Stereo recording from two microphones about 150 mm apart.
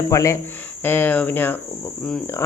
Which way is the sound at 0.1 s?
20° left (ahead or behind).